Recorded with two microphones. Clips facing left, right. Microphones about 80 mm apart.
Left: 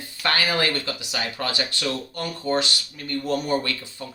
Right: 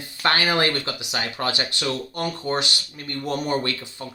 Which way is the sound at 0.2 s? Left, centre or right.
Right.